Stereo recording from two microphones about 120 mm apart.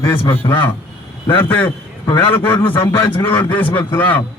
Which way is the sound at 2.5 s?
45° left (ahead or behind).